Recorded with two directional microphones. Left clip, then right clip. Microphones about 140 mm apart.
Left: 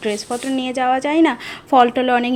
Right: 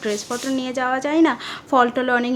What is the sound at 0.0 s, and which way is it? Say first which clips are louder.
A woman's voice: left 2 dB; 10° left (ahead or behind).